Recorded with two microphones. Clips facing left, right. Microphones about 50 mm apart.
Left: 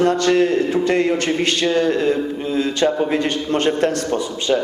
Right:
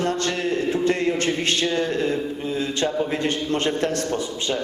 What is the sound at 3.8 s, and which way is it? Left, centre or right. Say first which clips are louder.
Mantra: left 4 dB; left.